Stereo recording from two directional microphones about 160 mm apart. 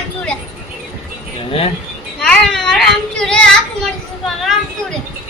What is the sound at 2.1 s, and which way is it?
Child singing, 5° left (ahead or behind).